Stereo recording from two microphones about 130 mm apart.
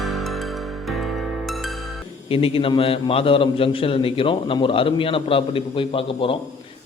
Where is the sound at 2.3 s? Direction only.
45° left (ahead or behind).